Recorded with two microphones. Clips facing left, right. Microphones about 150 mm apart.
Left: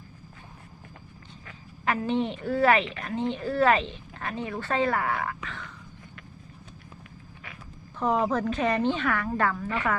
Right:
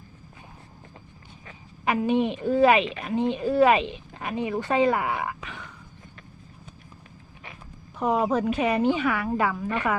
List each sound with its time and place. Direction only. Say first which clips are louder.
1.8 s a woman's voice: right 4 dB; 15° right (ahead or behind)
7.9 s a woman's voice: right 2 dB; 10° right (ahead or behind)